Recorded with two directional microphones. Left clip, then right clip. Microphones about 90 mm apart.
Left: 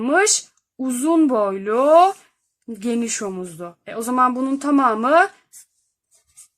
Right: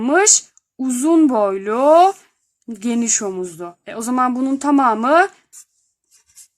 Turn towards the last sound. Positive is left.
turn(degrees=-35)  # may be behind; listen again after turning